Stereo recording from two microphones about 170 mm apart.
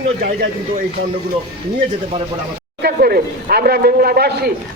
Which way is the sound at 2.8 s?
65° right (ahead or behind).